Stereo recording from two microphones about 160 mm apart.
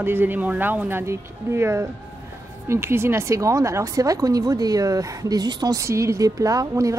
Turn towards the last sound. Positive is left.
turn(degrees=-20)  # may be behind; listen again after turning